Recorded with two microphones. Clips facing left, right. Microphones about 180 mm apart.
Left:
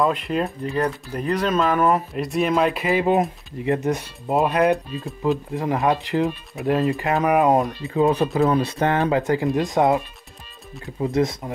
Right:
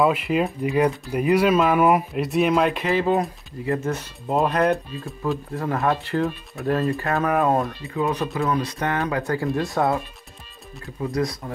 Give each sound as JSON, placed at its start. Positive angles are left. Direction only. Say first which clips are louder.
{"t": 0.0, "sound": "speech", "louder": "right 1 dB", "side_deg": -5}
{"t": 2.9, "sound": "speech", "louder": "left 2 dB", "side_deg": 15}
{"t": 4.3, "sound": "speech", "louder": "left 2 dB", "side_deg": 5}
{"t": 5.2, "sound": "speech", "louder": "left 3 dB", "side_deg": 15}
{"t": 8.0, "sound": "speech", "louder": "left 5 dB", "side_deg": 30}